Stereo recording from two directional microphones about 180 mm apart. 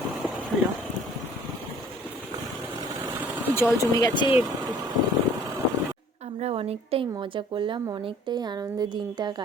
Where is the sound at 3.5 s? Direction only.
15° left (ahead or behind).